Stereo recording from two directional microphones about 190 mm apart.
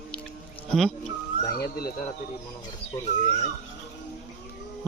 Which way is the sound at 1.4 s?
55° left (ahead or behind).